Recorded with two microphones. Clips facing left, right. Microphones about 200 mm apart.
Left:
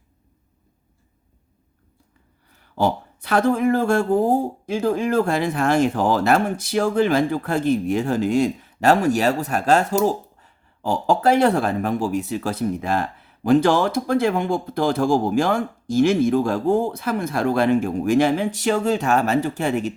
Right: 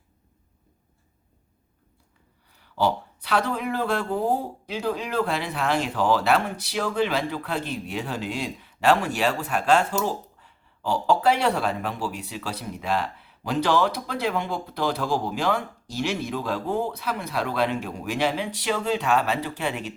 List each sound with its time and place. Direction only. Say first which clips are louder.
2.6 s speech: left 3 dB; 50° left (ahead or behind)